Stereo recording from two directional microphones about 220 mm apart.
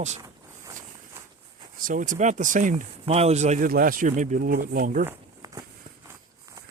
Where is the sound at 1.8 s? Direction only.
35° right (ahead or behind).